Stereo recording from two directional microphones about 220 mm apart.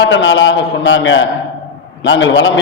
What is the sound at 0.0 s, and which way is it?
A man's voice, 55° left (ahead or behind).